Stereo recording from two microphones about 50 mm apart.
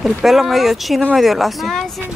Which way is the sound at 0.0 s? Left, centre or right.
Centre.